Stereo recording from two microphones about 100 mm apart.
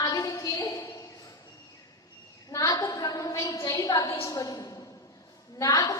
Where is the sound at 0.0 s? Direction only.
35° left (ahead or behind).